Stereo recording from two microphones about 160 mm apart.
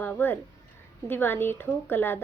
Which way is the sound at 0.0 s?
10° left (ahead or behind).